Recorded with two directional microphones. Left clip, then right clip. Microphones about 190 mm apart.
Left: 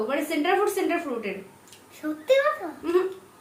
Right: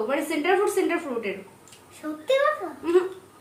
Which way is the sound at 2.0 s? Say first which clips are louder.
Left 2 dB; 20° left (ahead or behind).